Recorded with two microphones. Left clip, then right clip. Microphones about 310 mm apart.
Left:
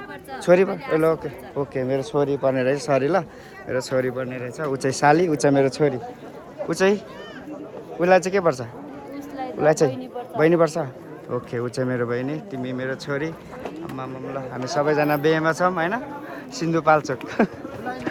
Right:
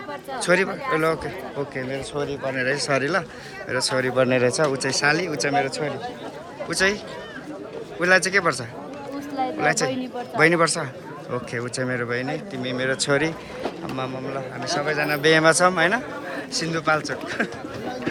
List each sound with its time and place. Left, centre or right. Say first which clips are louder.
0.4 s a man's voice: left 3 dB; centre
4.8 s a man's voice: left 3 dB; centre
8.0 s speech: left 1 dB; centre
10.3 s speech: even; centre
14.8 s a man's voice: left 4 dB; centre